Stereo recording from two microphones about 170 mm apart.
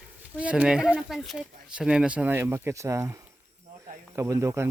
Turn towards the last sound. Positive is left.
turn(degrees=-15)  # may be behind; listen again after turning